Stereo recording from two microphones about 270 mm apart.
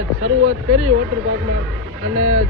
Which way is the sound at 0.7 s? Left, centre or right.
Right.